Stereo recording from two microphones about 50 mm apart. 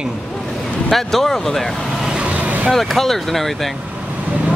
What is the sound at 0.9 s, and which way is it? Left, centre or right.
Speech, centre.